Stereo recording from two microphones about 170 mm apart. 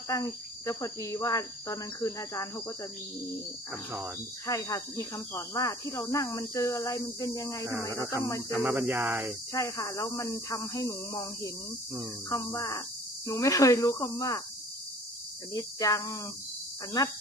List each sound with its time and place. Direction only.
0.1 s cricket: 20° left (ahead or behind)
3.7 s speech: 10° right (ahead or behind)
4.4 s cricket: 20° left (ahead or behind)
8.5 s speech: 10° right (ahead or behind)
9.5 s cricket: 20° left (ahead or behind)
12.3 s cricket: 20° left (ahead or behind)
15.5 s cricket: 20° left (ahead or behind)